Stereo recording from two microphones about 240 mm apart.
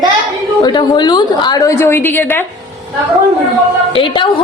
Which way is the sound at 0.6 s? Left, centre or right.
Centre.